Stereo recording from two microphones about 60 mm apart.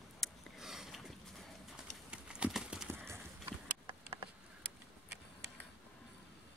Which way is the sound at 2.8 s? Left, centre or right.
Right.